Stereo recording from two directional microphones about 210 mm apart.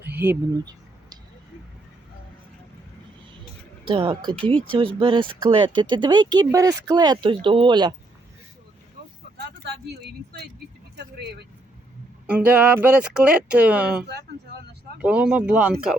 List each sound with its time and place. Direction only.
0.0 s speech: 10° right (ahead or behind)
0.6 s a sound: 20° right (ahead or behind)
3.8 s speech: 25° right (ahead or behind)
9.4 s vehicle: 50° right (ahead or behind)
10.9 s keys jangling: 55° right (ahead or behind)
12.3 s speech: 10° right (ahead or behind)
15.0 s speech: 5° right (ahead or behind)